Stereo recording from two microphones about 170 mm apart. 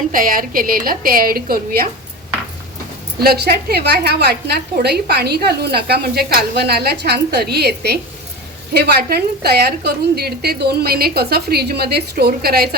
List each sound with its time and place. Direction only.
0.1 s a woman's voice: 55° right (ahead or behind)
3.2 s a woman's voice: 70° right (ahead or behind)